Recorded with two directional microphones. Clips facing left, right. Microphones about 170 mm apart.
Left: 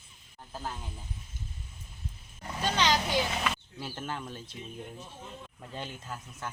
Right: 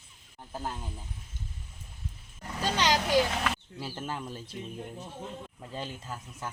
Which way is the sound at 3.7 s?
5° right (ahead or behind).